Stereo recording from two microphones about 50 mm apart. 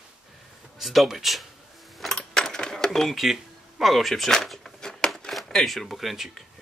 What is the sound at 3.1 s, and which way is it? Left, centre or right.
Drawer open or close, centre.